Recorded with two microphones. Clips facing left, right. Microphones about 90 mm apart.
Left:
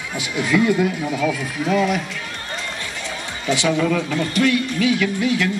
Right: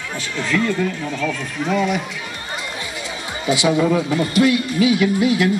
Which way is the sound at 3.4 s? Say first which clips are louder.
Right 2 dB; 15° right (ahead or behind).